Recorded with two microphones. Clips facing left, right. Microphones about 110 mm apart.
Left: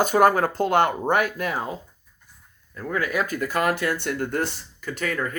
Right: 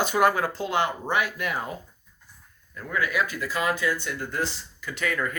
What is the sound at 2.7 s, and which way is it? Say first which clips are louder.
Speech: left 2 dB; 40° left (ahead or behind).